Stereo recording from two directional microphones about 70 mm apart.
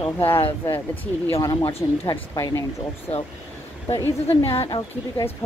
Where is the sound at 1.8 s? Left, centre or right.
Left.